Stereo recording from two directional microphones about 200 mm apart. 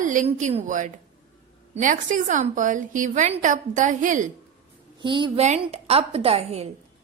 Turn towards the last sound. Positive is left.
turn(degrees=-30)  # may be behind; listen again after turning